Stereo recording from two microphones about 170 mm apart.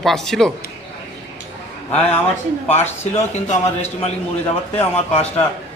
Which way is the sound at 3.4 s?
40° left (ahead or behind).